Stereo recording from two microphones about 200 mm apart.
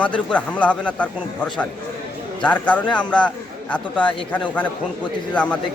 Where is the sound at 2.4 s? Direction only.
5° left (ahead or behind).